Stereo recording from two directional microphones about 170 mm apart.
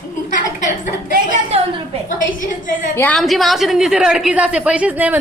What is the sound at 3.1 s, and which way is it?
A woman's voice, centre (ahead or behind).